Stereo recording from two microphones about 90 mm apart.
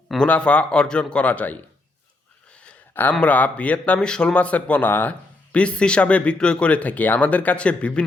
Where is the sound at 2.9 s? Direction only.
20° left (ahead or behind).